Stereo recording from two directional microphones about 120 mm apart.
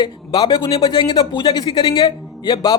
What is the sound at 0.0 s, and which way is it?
A man's voice, 40° left (ahead or behind).